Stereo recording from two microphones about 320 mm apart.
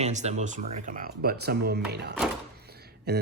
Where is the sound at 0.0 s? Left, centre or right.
Right.